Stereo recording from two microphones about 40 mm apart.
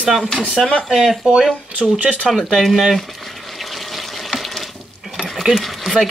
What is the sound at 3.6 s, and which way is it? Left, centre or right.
Water, centre.